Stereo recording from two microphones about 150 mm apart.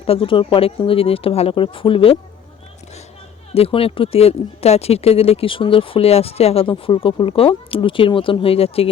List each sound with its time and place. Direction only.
0.0 s speech: 40° left (ahead or behind)
3.5 s speech: 40° left (ahead or behind)